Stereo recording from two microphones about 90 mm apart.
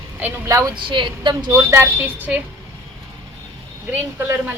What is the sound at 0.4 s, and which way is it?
Speech, 35° right (ahead or behind).